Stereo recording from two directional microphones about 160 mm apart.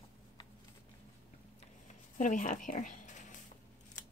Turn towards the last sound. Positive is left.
turn(degrees=50)  # may be behind; listen again after turning